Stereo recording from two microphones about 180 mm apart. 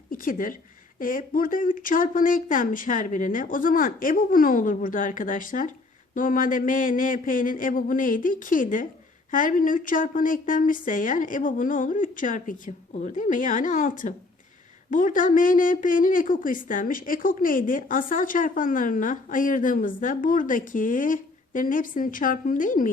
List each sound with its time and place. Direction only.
0.1 s a woman's voice: 50° left (ahead or behind)